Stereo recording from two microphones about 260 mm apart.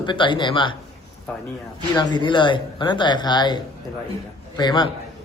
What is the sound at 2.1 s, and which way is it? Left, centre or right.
A man's voice, centre.